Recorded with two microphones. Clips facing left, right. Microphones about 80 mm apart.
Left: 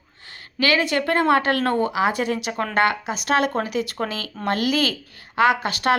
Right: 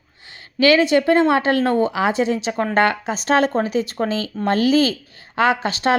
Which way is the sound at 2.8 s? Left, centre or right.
Right.